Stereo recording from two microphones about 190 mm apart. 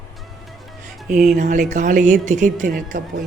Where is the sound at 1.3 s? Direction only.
40° right (ahead or behind).